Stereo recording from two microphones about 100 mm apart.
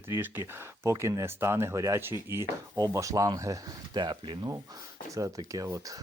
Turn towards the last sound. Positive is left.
turn(degrees=-35)  # may be behind; listen again after turning